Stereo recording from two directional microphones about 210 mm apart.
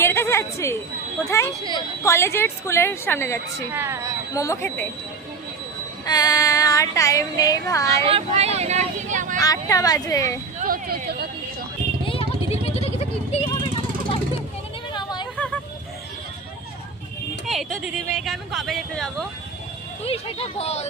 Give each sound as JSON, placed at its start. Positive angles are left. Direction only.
{"t": 0.0, "sound": "a sound", "side_deg": 10}
{"t": 1.3, "sound": "speech", "side_deg": 15}
{"t": 3.7, "sound": "speech", "side_deg": -10}
{"t": 4.4, "sound": "speech", "side_deg": 15}
{"t": 6.1, "sound": "speech", "side_deg": 20}
{"t": 8.0, "sound": "speech", "side_deg": -30}
{"t": 9.4, "sound": "speech", "side_deg": 15}
{"t": 10.6, "sound": "speech", "side_deg": -45}
{"t": 12.0, "sound": "a sound", "side_deg": 25}
{"t": 14.9, "sound": "a sound", "side_deg": 20}
{"t": 17.4, "sound": "a sound", "side_deg": 0}
{"t": 17.8, "sound": "speech", "side_deg": 0}
{"t": 20.1, "sound": "speech", "side_deg": 30}